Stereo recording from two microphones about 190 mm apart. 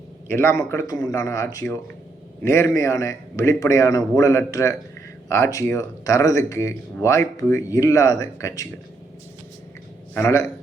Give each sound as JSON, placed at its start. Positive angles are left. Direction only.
{"t": 0.3, "sound": "speech", "side_deg": 15}
{"t": 10.2, "sound": "speech", "side_deg": 15}